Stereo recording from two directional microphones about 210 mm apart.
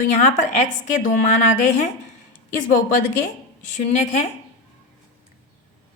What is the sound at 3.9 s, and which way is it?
Speech, 30° left (ahead or behind).